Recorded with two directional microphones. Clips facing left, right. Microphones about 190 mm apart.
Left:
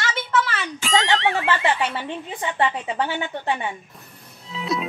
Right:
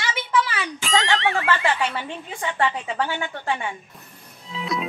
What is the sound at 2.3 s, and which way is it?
A woman's voice, 20° left (ahead or behind).